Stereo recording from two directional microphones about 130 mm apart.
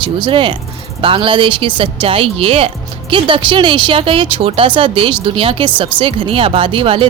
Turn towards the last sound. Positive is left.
turn(degrees=-40)  # may be behind; listen again after turning